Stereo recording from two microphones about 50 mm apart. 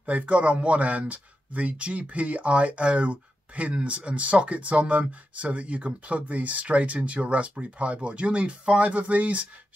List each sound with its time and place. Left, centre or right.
0.0 s speech: right